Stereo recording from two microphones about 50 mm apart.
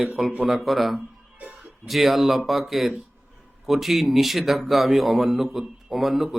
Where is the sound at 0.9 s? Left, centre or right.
Right.